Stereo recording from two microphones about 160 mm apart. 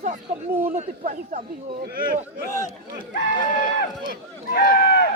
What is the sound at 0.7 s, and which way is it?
Speech, 50° right (ahead or behind).